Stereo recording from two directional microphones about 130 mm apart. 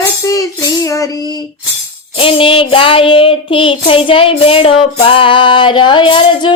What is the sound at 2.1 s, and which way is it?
Child singing, 45° left (ahead or behind).